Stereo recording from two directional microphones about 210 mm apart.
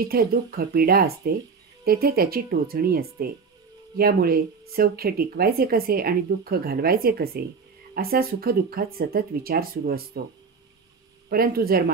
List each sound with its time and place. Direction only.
0.0 s speech: 45° right (ahead or behind)
11.2 s speech: 45° right (ahead or behind)